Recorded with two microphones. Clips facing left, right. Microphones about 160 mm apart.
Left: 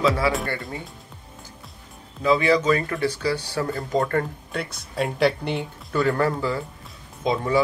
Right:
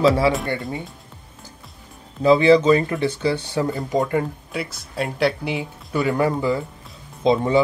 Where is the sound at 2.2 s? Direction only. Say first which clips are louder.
Right 6 dB; 30° right (ahead or behind).